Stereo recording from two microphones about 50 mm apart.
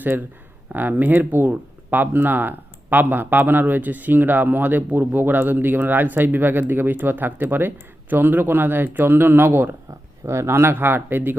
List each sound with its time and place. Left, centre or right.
0.7 s speech: right
10.2 s speech: right